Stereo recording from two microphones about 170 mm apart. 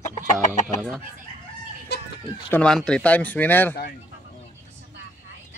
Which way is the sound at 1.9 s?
80° left.